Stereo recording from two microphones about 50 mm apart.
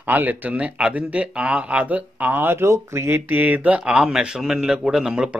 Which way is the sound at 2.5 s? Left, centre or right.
Right.